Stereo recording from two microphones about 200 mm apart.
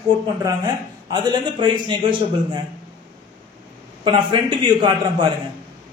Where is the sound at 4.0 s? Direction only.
25° right (ahead or behind).